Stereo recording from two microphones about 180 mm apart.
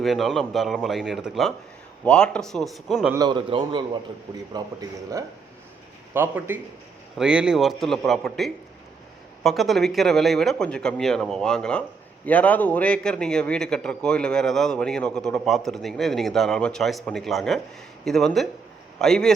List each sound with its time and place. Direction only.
0.0 s a man's voice: centre (ahead or behind)
3.2 s a man's voice: 25° right (ahead or behind); by 19.3 s 5° left (ahead or behind)